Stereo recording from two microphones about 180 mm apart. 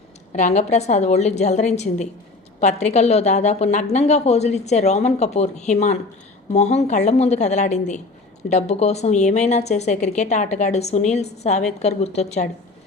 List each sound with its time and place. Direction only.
0.3 s a woman's voice: 40° left (ahead or behind)